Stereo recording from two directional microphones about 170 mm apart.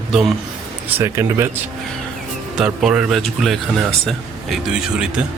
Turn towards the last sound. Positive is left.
turn(degrees=0)  # may be behind; listen again after turning